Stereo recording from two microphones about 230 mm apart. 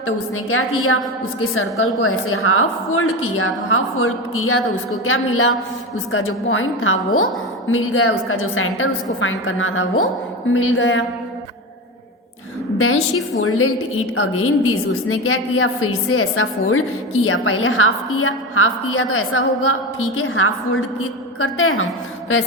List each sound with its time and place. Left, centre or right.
0.5 s a woman's voice: left
13.4 s a woman's voice: left